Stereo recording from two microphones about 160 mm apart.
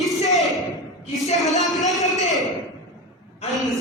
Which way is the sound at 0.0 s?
Centre (ahead or behind).